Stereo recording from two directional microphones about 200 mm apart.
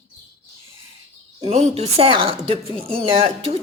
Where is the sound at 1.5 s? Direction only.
30° right (ahead or behind).